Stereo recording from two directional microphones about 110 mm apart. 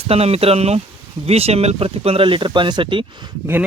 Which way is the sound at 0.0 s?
65° right (ahead or behind).